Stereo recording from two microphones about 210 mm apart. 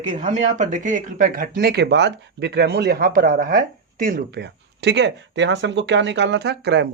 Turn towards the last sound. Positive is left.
turn(degrees=-55)  # may be behind; listen again after turning